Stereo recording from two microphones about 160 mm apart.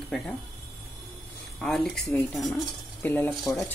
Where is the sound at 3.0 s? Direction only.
15° left (ahead or behind).